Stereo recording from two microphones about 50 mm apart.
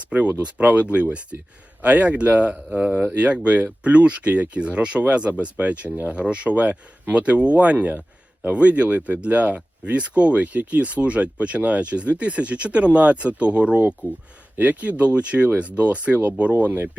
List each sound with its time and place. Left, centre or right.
0.1 s speech: right